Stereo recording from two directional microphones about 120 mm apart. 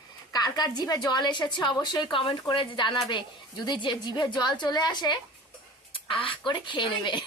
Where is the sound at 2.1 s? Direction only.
45° left (ahead or behind).